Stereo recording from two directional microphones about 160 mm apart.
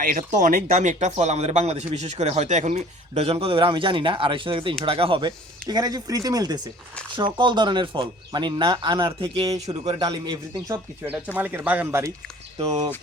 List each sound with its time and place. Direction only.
0.0 s speech: 55° right (ahead or behind); by 10.8 s 25° right (ahead or behind)
11.3 s speech: 10° right (ahead or behind)